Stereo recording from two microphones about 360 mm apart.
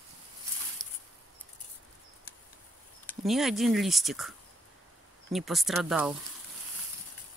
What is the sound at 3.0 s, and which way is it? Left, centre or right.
Speech, centre.